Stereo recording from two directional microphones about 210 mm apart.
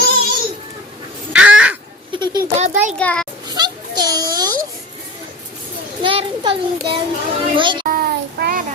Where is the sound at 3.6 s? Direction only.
20° right (ahead or behind).